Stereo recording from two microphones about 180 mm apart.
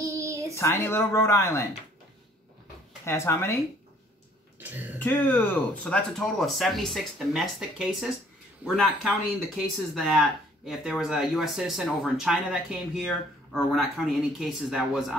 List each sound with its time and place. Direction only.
0.0 s a sound: 15° right (ahead or behind)
0.6 s speech: 15° left (ahead or behind)
3.1 s speech: 15° left (ahead or behind)
4.6 s speech: 10° right (ahead or behind)
4.9 s speech: 10° left (ahead or behind)